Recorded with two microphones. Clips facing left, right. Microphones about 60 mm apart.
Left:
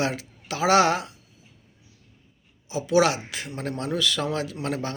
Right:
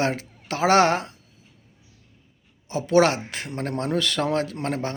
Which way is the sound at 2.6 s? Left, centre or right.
Right.